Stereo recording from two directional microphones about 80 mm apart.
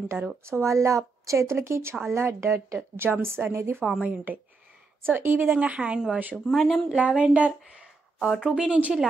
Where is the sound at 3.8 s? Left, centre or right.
Centre.